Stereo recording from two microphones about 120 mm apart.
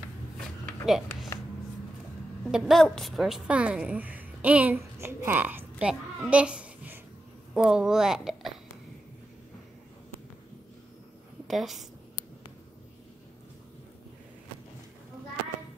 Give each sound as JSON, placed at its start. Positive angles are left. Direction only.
{"t": 0.8, "sound": "a sound", "side_deg": 0}
{"t": 2.4, "sound": "a woman's voice", "side_deg": 0}
{"t": 11.4, "sound": "a woman's voice", "side_deg": 0}